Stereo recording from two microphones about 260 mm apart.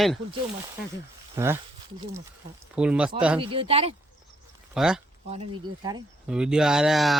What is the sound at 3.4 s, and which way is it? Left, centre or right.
Speech, right.